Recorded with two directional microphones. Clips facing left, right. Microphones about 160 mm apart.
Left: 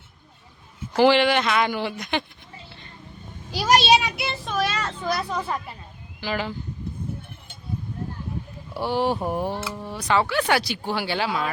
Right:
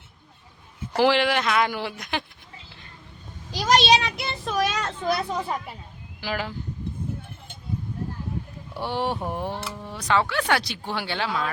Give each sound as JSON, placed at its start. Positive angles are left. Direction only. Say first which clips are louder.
{"t": 0.9, "sound": "speech", "louder": "left 3 dB", "side_deg": 0}
{"t": 3.5, "sound": "a child's voice", "louder": "left 1 dB", "side_deg": 10}
{"t": 4.5, "sound": "a child's voice", "louder": "right 1 dB", "side_deg": -15}
{"t": 6.1, "sound": "speech", "louder": "left 2 dB", "side_deg": -5}
{"t": 8.7, "sound": "speech", "louder": "left 4 dB", "side_deg": 5}